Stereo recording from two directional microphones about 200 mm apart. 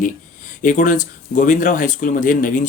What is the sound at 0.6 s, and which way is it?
Speech, 40° left (ahead or behind).